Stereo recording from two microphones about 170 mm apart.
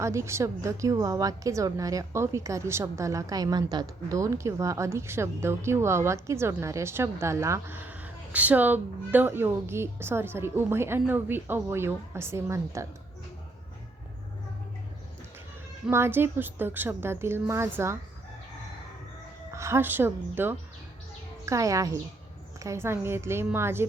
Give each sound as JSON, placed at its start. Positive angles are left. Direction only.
{"t": 0.0, "sound": "a woman's voice", "side_deg": -15}
{"t": 15.9, "sound": "a woman's voice", "side_deg": -15}
{"t": 19.5, "sound": "a woman's voice", "side_deg": -15}